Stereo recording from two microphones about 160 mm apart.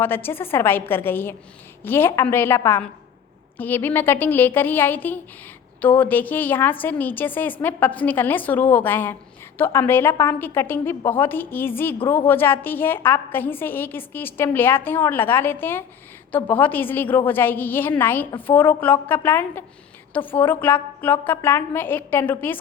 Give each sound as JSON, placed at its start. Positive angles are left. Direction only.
{"t": 0.0, "sound": "a woman's voice", "side_deg": 15}